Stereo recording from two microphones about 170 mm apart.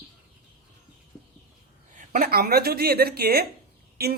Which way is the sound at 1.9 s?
50° right (ahead or behind).